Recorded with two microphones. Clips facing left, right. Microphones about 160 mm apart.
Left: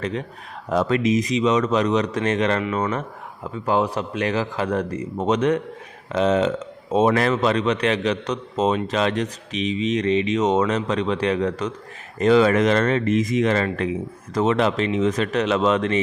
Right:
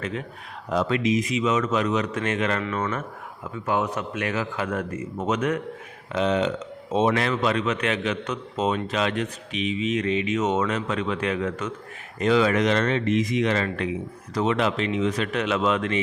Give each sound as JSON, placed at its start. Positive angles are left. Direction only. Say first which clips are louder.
{"t": 0.0, "sound": "a man's voice", "louder": "left 4 dB", "side_deg": 35}
{"t": 0.7, "sound": "a man's voice", "louder": "left 3 dB", "side_deg": 45}
{"t": 2.6, "sound": "speech", "louder": "left 4 dB", "side_deg": 15}
{"t": 3.7, "sound": "a man's voice", "louder": "left 4 dB", "side_deg": 30}